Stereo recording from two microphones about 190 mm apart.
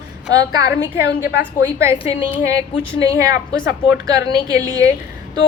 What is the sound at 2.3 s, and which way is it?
Speech, 15° right (ahead or behind).